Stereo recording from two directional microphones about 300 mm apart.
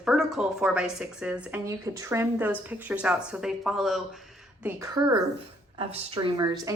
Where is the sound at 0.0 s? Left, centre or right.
Centre.